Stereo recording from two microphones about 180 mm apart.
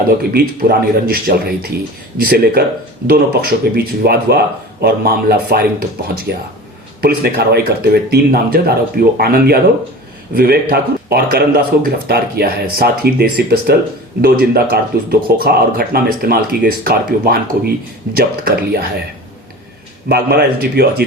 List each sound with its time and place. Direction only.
0.2 s speech: 55° right (ahead or behind)
20.1 s speech: 60° right (ahead or behind)